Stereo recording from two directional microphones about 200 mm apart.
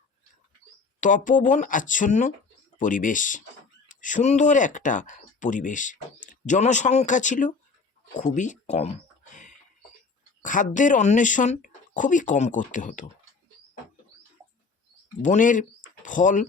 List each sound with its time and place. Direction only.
1.0 s speech: 40° left (ahead or behind)
10.4 s speech: 40° left (ahead or behind)
15.2 s speech: 40° left (ahead or behind)